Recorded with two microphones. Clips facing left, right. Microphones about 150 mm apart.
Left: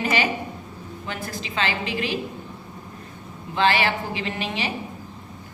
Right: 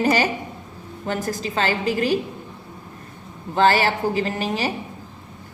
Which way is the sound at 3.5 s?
40° right (ahead or behind).